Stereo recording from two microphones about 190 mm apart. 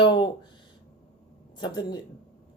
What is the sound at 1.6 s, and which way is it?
Speech, 20° left (ahead or behind).